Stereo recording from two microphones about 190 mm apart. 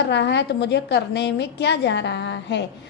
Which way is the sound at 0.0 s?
65° left (ahead or behind).